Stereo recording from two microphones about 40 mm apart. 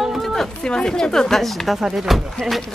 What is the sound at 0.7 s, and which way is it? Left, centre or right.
Speech, left.